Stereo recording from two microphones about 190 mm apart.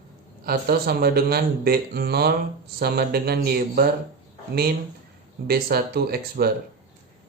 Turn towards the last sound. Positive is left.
turn(degrees=-55)  # may be behind; listen again after turning